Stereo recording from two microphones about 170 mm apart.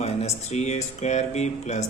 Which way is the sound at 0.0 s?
40° left (ahead or behind).